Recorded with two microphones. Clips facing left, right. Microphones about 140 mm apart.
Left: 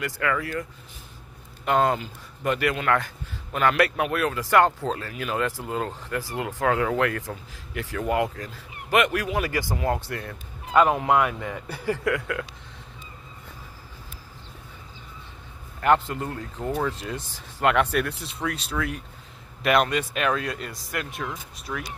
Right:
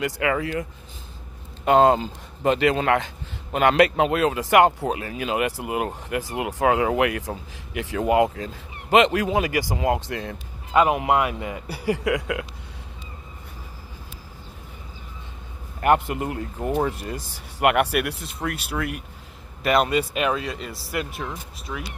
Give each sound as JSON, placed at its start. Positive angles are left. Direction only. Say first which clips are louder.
{"t": 0.0, "sound": "speech", "louder": "right 3 dB", "side_deg": -20}
{"t": 15.8, "sound": "speech", "louder": "right 2 dB", "side_deg": -10}